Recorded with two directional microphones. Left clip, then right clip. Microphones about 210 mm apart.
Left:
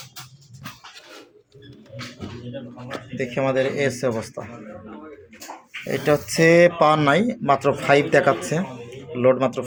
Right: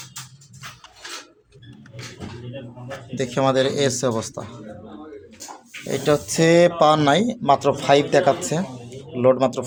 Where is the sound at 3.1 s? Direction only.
20° right (ahead or behind).